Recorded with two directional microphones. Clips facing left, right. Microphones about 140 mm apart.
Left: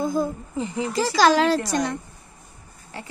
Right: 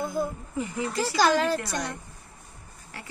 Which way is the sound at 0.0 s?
90° left.